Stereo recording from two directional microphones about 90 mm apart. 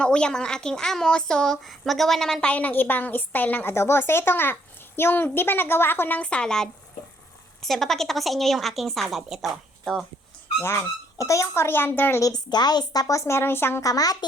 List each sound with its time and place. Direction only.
0.0 s a woman's voice: 10° left (ahead or behind)
10.6 s a woman's voice: 30° left (ahead or behind)
12.2 s a woman's voice: 50° left (ahead or behind); by 13.8 s 25° left (ahead or behind)
13.8 s speech: 45° left (ahead or behind)